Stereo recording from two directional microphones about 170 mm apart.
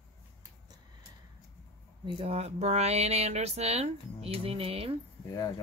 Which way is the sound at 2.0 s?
30° right (ahead or behind).